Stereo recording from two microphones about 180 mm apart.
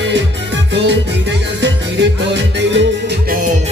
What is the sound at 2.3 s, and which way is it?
Music, 80° right.